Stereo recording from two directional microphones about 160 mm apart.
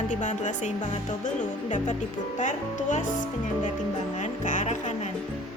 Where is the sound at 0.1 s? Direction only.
50° left (ahead or behind).